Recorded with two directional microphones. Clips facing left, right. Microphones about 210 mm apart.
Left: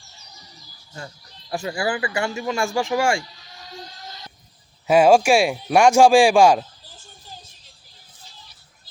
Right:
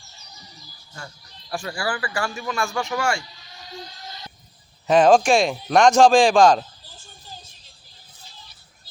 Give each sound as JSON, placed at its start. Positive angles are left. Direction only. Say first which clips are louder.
{"t": 0.9, "sound": "speech", "louder": "left 3 dB", "side_deg": 20}
{"t": 4.9, "sound": "speech", "louder": "left 1 dB", "side_deg": 10}